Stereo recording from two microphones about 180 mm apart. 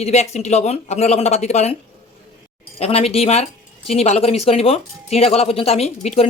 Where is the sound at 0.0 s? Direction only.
40° left (ahead or behind).